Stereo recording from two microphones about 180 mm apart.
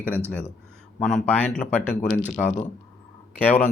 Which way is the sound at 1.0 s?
5° left (ahead or behind).